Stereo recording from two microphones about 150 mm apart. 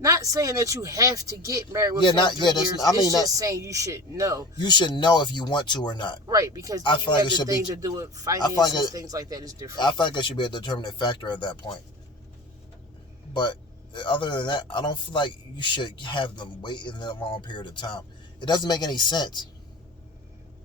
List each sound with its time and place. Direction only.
0.0 s speech: 20° right (ahead or behind)
2.0 s speech: 30° left (ahead or behind)
3.2 s speech: 20° right (ahead or behind)
4.5 s a man's voice: 30° left (ahead or behind)
6.2 s speech: 20° right (ahead or behind)
6.8 s a man's voice: 30° left (ahead or behind)
7.4 s speech: 20° right (ahead or behind)
8.4 s speech: 25° left (ahead or behind)
8.9 s speech: 25° right (ahead or behind)
9.7 s a man's voice: 30° left (ahead or behind)
13.3 s a man's voice: 30° left (ahead or behind)